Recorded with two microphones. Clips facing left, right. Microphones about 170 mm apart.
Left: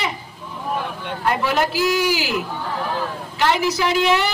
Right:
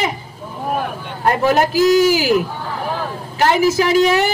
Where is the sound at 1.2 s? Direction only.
45° right (ahead or behind).